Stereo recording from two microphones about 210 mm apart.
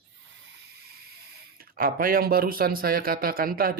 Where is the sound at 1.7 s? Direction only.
45° right (ahead or behind).